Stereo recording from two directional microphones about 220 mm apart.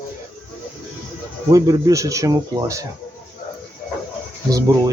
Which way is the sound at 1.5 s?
15° right (ahead or behind).